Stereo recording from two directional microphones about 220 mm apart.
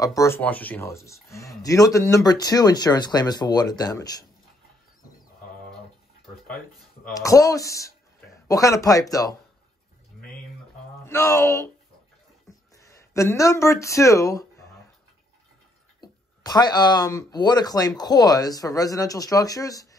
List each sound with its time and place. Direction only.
0.0 s speech: 15° left (ahead or behind)
7.2 s speech: 15° left (ahead or behind)
11.1 s speech: 15° left (ahead or behind)
12.4 s a sound: 15° left (ahead or behind)
16.0 s speech: 20° left (ahead or behind)